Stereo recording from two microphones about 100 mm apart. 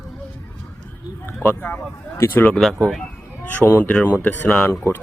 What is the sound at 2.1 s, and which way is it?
Speech, 25° left (ahead or behind).